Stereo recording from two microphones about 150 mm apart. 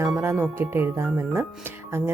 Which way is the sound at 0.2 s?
15° right (ahead or behind).